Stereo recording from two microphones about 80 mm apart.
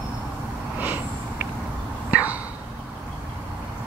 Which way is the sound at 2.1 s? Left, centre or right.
Right.